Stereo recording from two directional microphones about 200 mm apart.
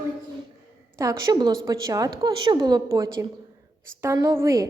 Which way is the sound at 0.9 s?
20° right (ahead or behind).